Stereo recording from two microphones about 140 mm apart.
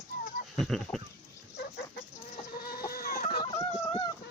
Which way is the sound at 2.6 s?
90° left.